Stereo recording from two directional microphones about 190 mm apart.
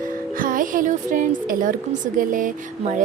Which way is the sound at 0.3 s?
45° right (ahead or behind).